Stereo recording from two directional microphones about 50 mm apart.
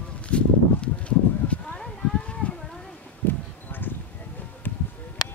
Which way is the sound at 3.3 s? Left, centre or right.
Left.